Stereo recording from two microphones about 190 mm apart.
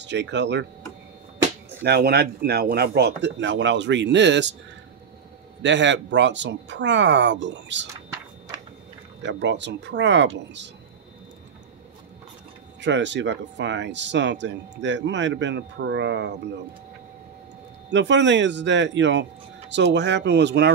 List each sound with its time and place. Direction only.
0.0 s speech: 70° right (ahead or behind)
1.8 s speech: 55° right (ahead or behind)
5.6 s speech: 70° right (ahead or behind)
9.2 s speech: 70° right (ahead or behind)
12.8 s speech: 70° right (ahead or behind)
17.9 s speech: 70° right (ahead or behind)